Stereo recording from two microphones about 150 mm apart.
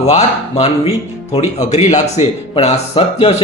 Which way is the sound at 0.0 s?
45° left (ahead or behind).